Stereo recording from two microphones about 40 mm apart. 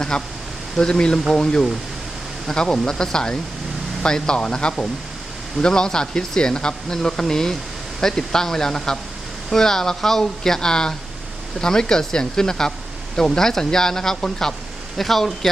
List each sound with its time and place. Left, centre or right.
0.1 s speech: left
14.9 s speech: centre